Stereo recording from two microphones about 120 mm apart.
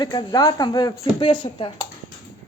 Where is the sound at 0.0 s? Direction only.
35° left (ahead or behind).